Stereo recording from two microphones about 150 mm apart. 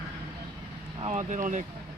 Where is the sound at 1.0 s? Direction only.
50° right (ahead or behind).